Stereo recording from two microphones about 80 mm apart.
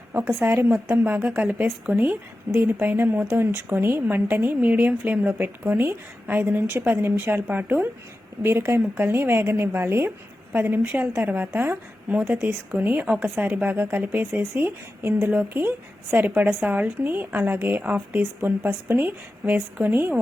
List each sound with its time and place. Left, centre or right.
0.4 s a woman's voice: right